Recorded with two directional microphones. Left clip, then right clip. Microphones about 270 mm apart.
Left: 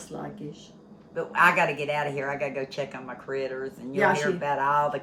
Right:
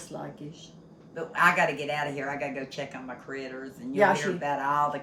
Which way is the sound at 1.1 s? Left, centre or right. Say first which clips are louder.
Left 2 dB; centre.